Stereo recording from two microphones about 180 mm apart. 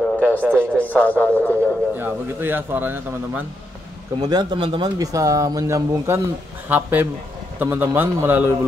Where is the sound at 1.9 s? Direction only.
10° right (ahead or behind).